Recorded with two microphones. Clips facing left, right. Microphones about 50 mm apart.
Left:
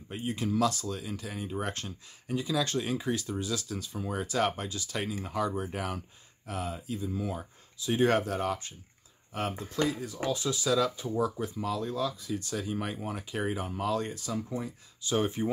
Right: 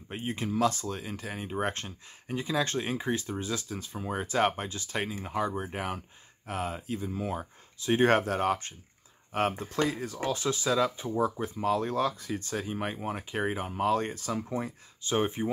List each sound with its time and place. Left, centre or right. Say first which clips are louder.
0.1 s speech: left 1 dB; right